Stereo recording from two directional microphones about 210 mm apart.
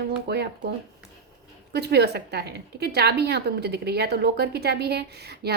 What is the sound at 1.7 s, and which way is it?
A woman's voice, 50° right (ahead or behind).